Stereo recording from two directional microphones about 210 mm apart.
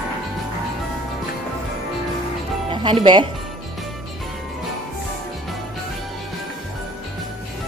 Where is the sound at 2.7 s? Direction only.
25° right (ahead or behind).